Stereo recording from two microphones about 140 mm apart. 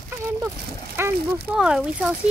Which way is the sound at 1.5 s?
5° right (ahead or behind).